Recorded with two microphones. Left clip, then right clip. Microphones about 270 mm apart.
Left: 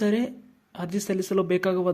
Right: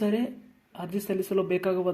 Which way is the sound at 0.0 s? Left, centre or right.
Left.